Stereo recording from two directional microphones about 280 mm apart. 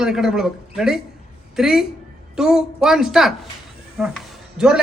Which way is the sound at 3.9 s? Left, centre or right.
Centre.